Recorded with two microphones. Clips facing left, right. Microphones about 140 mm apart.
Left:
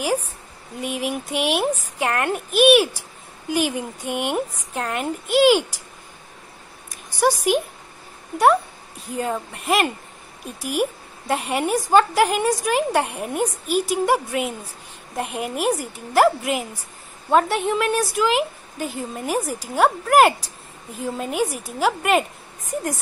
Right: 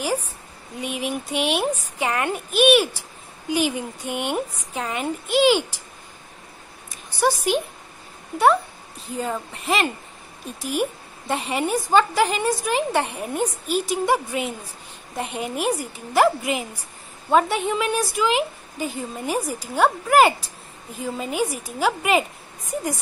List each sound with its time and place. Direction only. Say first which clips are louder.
0.0 s a woman's voice: left 2 dB; 10° left (ahead or behind)
7.1 s a woman's voice: left 2 dB; 10° left (ahead or behind)
9.1 s a woman's voice: left 2 dB; 5° left (ahead or behind)